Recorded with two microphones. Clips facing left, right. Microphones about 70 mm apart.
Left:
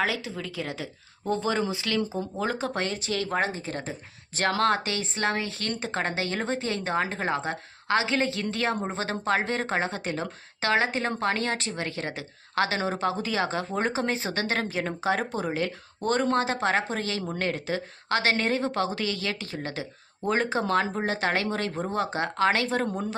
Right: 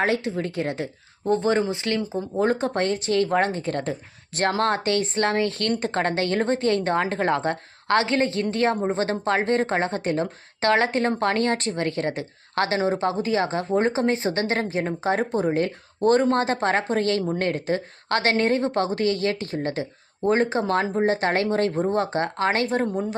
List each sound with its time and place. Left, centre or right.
0.0 s a woman's voice: right
1.3 s a woman's voice: right
4.4 s speech: right
4.8 s a woman's voice: right
12.8 s speech: right
15.5 s speech: right
16.0 s speech: right
16.3 s a woman's voice: right
22.6 s speech: right